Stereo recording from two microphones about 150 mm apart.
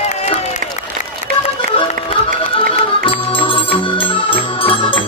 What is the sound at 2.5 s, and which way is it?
Music, 35° left (ahead or behind).